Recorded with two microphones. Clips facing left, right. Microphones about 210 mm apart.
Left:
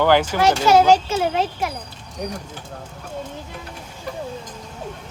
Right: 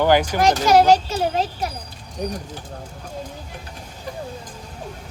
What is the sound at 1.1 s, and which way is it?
Speech, 35° right (ahead or behind).